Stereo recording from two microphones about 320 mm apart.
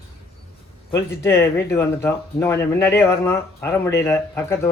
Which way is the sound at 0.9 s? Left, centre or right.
Centre.